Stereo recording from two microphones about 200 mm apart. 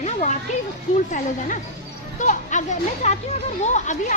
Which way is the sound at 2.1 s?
40° left (ahead or behind).